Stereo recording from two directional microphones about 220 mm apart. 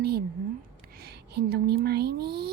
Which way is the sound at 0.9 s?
45° right (ahead or behind).